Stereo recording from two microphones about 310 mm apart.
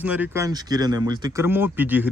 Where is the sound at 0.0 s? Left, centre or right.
Centre.